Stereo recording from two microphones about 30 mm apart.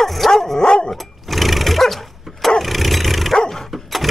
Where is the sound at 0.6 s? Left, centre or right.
Left.